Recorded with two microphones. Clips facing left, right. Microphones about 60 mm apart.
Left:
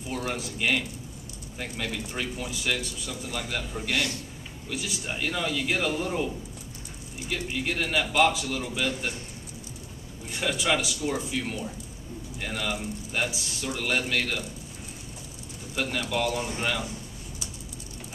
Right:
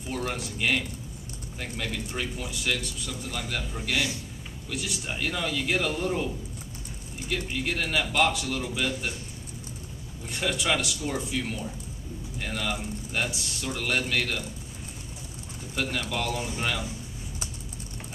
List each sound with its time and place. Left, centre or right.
0.1 s a man's voice: centre
3.9 s a man's voice: centre
4.6 s a man's voice: centre
10.3 s a man's voice: centre
15.7 s a man's voice: centre